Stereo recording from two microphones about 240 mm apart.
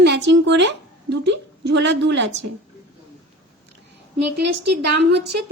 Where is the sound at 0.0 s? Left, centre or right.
Right.